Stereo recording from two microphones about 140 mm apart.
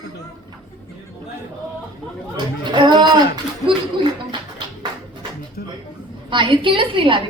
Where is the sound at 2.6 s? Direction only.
30° right (ahead or behind).